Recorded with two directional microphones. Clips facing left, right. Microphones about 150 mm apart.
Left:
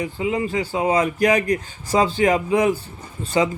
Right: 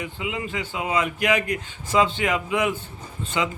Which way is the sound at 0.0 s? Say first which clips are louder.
Left 7 dB; 35° left (ahead or behind).